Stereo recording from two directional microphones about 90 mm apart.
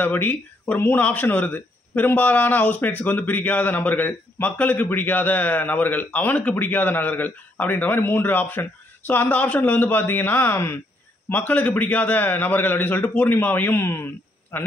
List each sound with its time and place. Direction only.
0.0 s speech: 20° left (ahead or behind)